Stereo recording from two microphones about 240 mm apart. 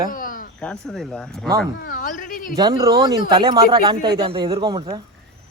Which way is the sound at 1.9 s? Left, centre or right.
Left.